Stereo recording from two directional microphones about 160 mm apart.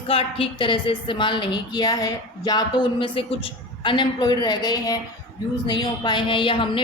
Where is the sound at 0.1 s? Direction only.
35° left (ahead or behind).